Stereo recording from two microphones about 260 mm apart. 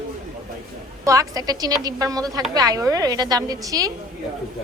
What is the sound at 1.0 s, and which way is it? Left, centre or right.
A woman's voice, centre.